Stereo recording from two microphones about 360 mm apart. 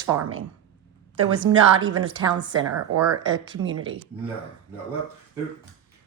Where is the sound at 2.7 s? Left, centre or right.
Right.